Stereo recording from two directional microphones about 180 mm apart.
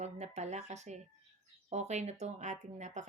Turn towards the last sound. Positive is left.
turn(degrees=-40)  # may be behind; listen again after turning